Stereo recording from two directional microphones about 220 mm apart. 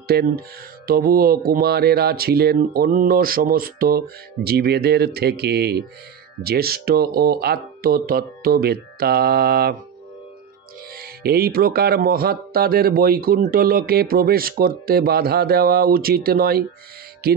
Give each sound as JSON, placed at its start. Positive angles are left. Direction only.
{"t": 0.1, "sound": "speech", "side_deg": -45}
{"t": 11.0, "sound": "speech", "side_deg": -45}